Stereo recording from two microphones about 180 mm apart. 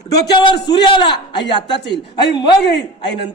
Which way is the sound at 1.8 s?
75° left (ahead or behind).